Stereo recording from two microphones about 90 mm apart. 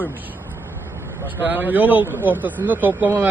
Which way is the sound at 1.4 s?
20° right (ahead or behind).